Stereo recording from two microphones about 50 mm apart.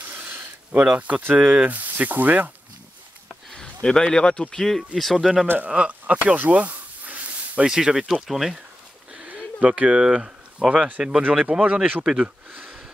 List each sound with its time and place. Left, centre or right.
0.0 s a sound: right
0.7 s speech: right
3.5 s speech: centre
5.9 s a sound: right
7.6 s speech: centre
9.3 s speech: right